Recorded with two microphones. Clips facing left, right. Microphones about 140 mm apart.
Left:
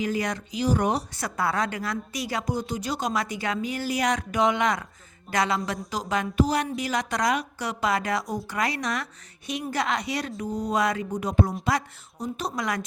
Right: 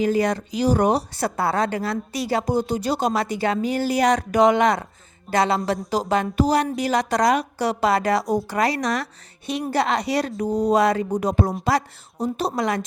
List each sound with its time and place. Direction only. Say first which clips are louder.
0.0 s a woman's voice: right 7 dB; 35° right (ahead or behind)